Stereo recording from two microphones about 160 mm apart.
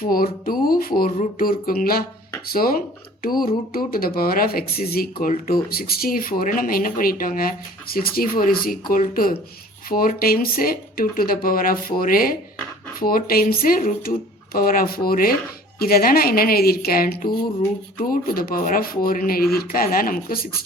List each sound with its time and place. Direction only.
0.0 s speech: 65° left (ahead or behind)